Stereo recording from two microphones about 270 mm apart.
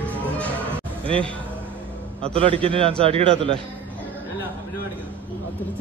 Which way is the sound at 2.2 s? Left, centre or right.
Right.